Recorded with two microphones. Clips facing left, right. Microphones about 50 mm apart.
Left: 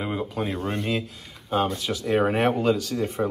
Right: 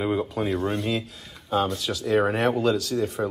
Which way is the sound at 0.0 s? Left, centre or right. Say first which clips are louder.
Right 3 dB; centre.